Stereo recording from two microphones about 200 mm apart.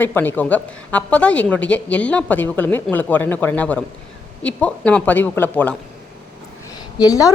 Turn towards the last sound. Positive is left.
turn(degrees=20)  # may be behind; listen again after turning